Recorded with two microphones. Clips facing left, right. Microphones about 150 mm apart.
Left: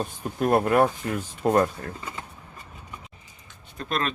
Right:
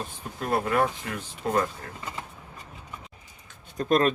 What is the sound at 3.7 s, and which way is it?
Speech, 45° right (ahead or behind).